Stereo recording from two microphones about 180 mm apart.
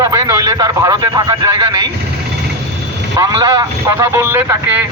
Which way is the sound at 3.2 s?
20° right (ahead or behind).